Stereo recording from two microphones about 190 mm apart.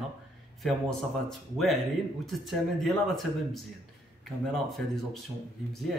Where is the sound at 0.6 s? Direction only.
Centre (ahead or behind).